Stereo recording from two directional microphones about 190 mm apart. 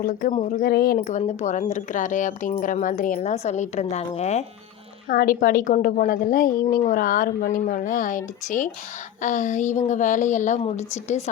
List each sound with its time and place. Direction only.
0.0 s a woman's voice: 45° left (ahead or behind)
5.0 s a woman's voice: 50° left (ahead or behind)